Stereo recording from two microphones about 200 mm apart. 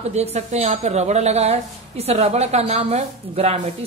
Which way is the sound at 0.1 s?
35° right (ahead or behind).